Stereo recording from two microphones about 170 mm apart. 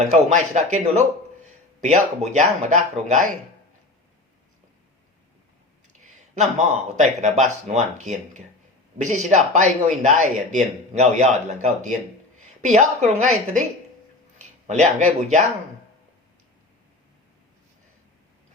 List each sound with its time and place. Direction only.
0.0 s speech: 45° right (ahead or behind)
5.9 s speech: 45° right (ahead or behind)
14.3 s speech: 45° right (ahead or behind)